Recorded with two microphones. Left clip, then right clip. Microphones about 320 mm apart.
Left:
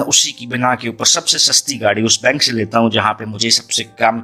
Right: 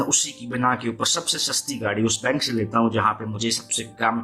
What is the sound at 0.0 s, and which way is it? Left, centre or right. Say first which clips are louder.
Speech: left 9 dB; left.